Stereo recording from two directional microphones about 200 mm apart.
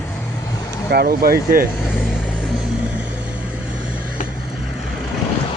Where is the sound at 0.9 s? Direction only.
50° right (ahead or behind).